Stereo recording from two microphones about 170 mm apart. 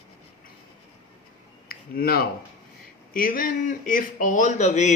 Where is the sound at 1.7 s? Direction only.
60° left (ahead or behind).